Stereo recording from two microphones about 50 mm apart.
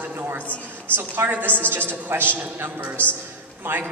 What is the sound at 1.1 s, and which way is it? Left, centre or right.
A man's voice, right.